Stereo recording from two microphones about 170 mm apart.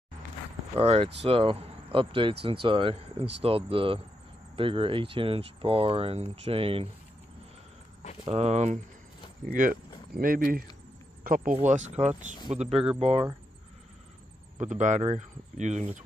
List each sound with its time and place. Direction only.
0.7 s speech: 35° right (ahead or behind)
8.3 s speech: 40° right (ahead or behind)
9.4 s speech: 55° right (ahead or behind)
11.5 s speech: 40° right (ahead or behind)
14.6 s speech: 45° right (ahead or behind)